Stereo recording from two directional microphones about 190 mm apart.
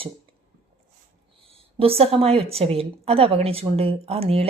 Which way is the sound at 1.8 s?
30° right (ahead or behind).